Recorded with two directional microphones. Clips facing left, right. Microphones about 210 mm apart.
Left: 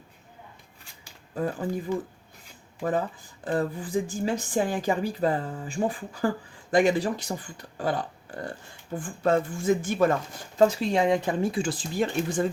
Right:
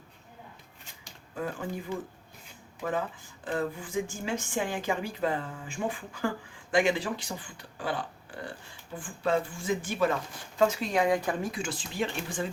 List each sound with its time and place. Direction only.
1.4 s speech: 35° left (ahead or behind)
2.8 s speech: 40° left (ahead or behind)
10.6 s speech: 35° left (ahead or behind)